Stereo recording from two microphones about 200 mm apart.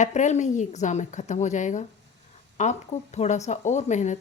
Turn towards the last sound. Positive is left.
turn(degrees=35)  # may be behind; listen again after turning